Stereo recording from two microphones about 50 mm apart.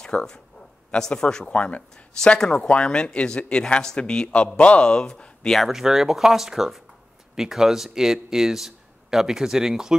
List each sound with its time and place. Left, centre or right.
0.0 s speech: centre
5.7 s speech: centre